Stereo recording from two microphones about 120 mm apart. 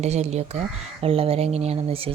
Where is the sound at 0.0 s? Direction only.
65° right (ahead or behind).